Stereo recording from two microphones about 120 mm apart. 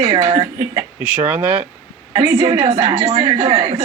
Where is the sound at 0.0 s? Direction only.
40° right (ahead or behind).